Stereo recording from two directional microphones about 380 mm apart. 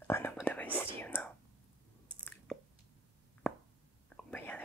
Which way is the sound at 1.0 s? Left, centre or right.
Centre.